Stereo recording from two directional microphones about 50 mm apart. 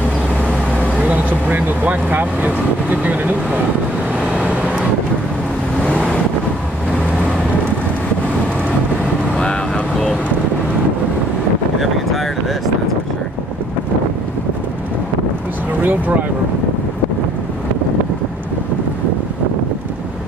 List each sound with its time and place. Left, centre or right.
1.0 s speech: right
4.3 s vehicle: right
15.8 s a sound: right